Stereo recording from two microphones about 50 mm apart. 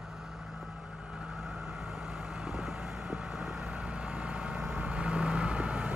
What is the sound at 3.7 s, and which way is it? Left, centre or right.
Vehicle, right.